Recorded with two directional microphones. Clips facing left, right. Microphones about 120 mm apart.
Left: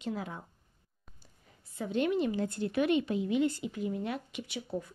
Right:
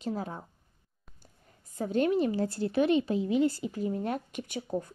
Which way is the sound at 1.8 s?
40° right (ahead or behind).